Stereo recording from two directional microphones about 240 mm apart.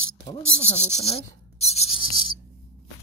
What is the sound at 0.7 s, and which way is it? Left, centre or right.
Cricket, left.